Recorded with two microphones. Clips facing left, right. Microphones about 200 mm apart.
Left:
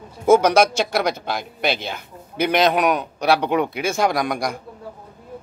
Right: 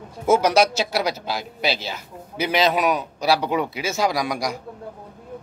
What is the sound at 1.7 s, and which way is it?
Speech, 55° left (ahead or behind).